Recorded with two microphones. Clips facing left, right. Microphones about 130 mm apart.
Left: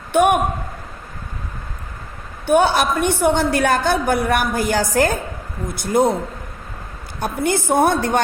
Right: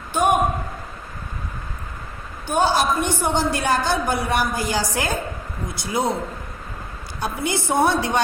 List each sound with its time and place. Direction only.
0.1 s a man's voice: 60° left (ahead or behind)
2.5 s a woman's voice: 60° left (ahead or behind)
7.2 s a woman's voice: 50° left (ahead or behind)